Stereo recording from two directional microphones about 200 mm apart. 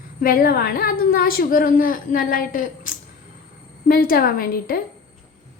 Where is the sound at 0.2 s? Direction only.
45° left (ahead or behind).